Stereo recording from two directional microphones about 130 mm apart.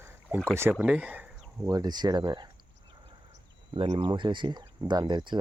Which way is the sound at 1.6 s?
30° right (ahead or behind).